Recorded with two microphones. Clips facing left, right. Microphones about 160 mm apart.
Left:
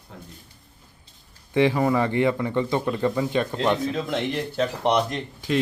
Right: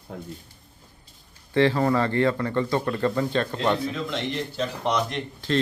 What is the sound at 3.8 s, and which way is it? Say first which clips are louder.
Speech: left 3 dB; 50° left (ahead or behind).